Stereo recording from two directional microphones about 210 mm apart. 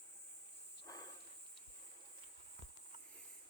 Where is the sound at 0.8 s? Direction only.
15° left (ahead or behind).